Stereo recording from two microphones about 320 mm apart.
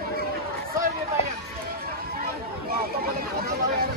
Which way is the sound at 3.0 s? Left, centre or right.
Right.